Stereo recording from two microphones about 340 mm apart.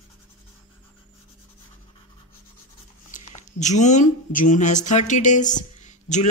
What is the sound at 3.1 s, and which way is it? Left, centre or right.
Speech, left.